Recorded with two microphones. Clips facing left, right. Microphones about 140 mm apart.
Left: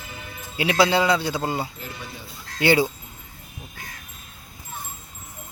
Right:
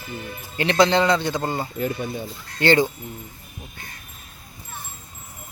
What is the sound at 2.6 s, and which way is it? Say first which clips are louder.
Speech: right 1 dB; 10° left (ahead or behind).